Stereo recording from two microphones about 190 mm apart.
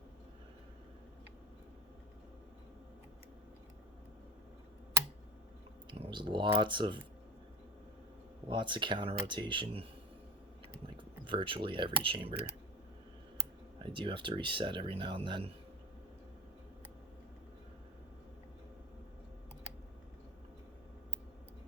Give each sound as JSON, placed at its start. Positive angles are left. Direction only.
{"t": 5.9, "sound": "speech", "side_deg": -25}
{"t": 8.4, "sound": "speech", "side_deg": -25}
{"t": 10.8, "sound": "speech", "side_deg": -25}
{"t": 13.8, "sound": "speech", "side_deg": -25}